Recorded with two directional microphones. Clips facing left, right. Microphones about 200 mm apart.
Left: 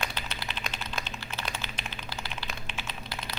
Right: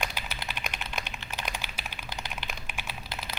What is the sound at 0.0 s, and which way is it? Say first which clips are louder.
Typing: even; 10° right (ahead or behind).